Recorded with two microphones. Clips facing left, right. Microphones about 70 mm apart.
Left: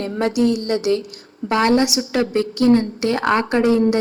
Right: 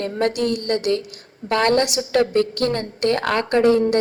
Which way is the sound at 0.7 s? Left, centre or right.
Centre.